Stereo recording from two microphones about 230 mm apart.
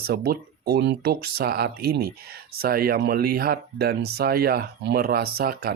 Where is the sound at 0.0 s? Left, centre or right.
Right.